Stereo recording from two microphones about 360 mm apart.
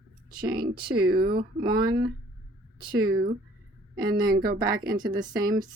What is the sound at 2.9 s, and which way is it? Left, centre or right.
Speech, right.